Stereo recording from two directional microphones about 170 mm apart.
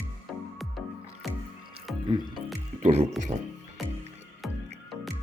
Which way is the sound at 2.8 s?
40° right (ahead or behind).